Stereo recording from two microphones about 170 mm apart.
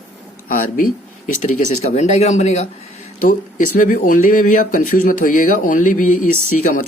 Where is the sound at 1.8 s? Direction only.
40° left (ahead or behind).